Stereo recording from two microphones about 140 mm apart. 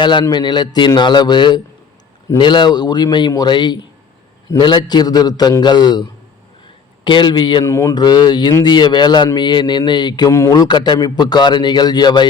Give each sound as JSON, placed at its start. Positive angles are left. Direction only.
{"t": 0.0, "sound": "speech", "side_deg": 35}
{"t": 7.6, "sound": "speech", "side_deg": 20}